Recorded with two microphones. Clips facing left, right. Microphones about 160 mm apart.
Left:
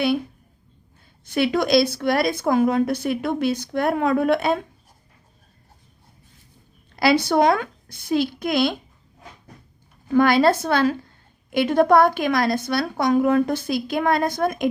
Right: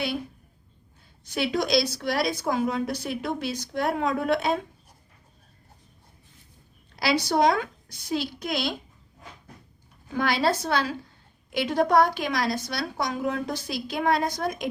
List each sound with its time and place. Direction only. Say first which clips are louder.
1.2 s a woman's voice: left 6 dB; 55° left (ahead or behind)
6.9 s a woman's voice: left 6 dB; 55° left (ahead or behind)
10.2 s a woman's voice: left 8 dB; 55° left (ahead or behind)